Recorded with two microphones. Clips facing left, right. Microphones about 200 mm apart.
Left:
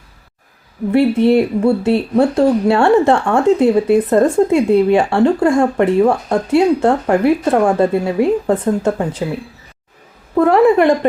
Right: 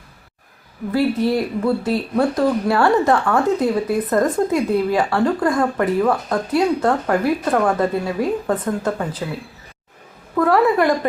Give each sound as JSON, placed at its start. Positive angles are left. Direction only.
{"t": 0.9, "sound": "speech", "side_deg": 25}